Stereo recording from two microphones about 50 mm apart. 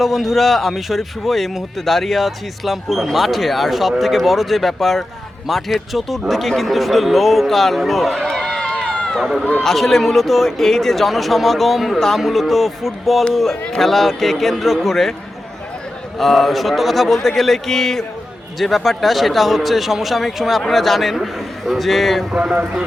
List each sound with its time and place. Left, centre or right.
0.0 s a man's voice: centre
8.3 s run: centre
9.1 s a man's voice: centre
9.4 s a man's voice: left
9.6 s a man's voice: centre
16.1 s a man's voice: centre